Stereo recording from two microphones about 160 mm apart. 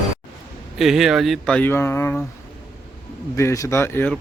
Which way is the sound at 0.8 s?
Centre (ahead or behind).